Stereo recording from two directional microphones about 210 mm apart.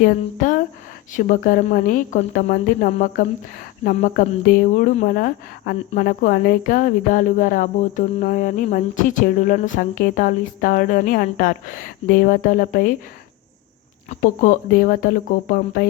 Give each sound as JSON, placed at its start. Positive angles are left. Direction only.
{"t": 0.0, "sound": "speech", "side_deg": 40}
{"t": 14.1, "sound": "speech", "side_deg": 40}